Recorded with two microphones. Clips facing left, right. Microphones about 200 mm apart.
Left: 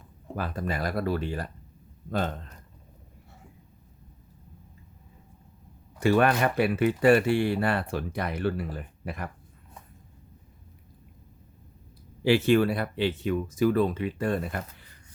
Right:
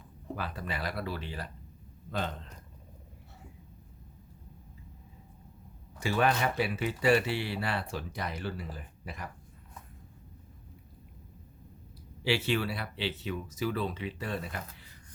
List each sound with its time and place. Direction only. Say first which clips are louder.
0.3 s speech: left 7 dB; 45° left (ahead or behind)
6.0 s speech: left 6 dB; 55° left (ahead or behind)
12.2 s speech: left 9 dB; 50° left (ahead or behind)